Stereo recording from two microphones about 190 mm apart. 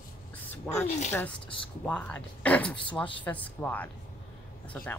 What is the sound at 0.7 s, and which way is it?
Speech, 10° left (ahead or behind).